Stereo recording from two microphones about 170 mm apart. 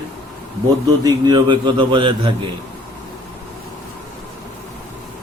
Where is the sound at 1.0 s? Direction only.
25° right (ahead or behind).